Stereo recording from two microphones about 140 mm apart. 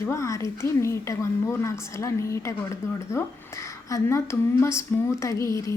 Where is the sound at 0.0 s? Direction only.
20° left (ahead or behind).